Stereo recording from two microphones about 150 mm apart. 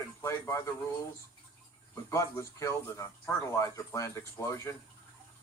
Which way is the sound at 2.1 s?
20° left (ahead or behind).